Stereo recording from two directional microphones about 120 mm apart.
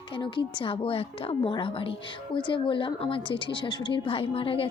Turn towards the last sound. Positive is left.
turn(degrees=50)  # may be behind; listen again after turning